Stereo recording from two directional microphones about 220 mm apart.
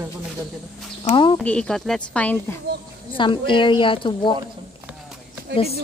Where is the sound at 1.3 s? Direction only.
5° left (ahead or behind).